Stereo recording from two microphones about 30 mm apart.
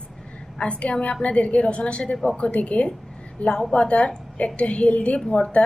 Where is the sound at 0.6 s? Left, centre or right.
Left.